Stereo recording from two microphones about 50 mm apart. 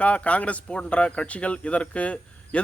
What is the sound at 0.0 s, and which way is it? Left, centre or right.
Speech, left.